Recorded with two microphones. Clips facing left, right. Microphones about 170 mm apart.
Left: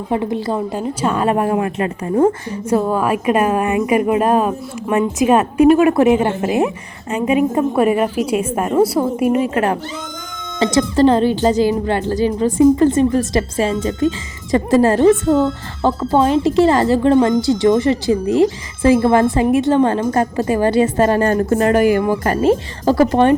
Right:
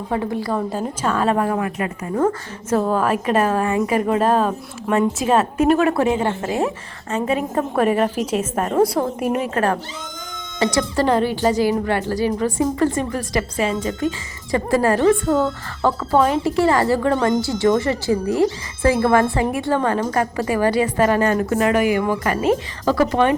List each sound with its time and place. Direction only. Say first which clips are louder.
0.1 s speech: left 3 dB; 20° left (ahead or behind)
2.6 s a woman's voice: left 2 dB; 10° left (ahead or behind)
10.6 s speech: left 6 dB; 20° left (ahead or behind)